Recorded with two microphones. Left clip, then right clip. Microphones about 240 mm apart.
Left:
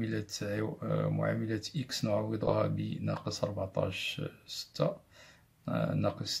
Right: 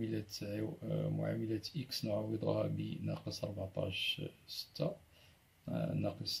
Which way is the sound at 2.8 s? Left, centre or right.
Centre.